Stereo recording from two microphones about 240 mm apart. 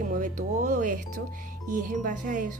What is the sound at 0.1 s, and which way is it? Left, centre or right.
Speech, right.